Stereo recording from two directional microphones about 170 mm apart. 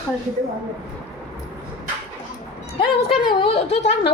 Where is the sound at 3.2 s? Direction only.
30° left (ahead or behind).